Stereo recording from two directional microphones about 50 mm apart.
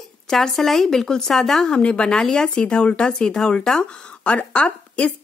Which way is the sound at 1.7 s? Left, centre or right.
Left.